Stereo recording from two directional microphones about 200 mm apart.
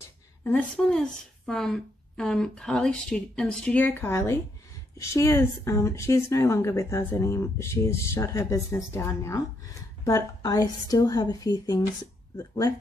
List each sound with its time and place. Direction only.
0.4 s a woman's voice: 10° left (ahead or behind)